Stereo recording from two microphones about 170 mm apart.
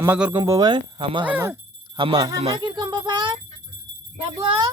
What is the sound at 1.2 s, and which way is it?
Speech, 10° right (ahead or behind).